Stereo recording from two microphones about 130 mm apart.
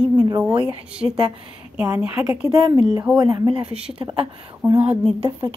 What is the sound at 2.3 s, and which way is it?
Speech, 25° right (ahead or behind).